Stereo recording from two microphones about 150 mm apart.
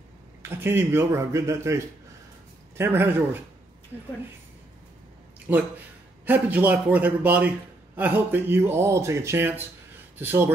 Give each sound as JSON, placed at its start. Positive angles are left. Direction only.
{"t": 0.4, "sound": "a man's voice", "side_deg": -15}
{"t": 2.8, "sound": "a man's voice", "side_deg": -15}
{"t": 5.5, "sound": "a man's voice", "side_deg": -15}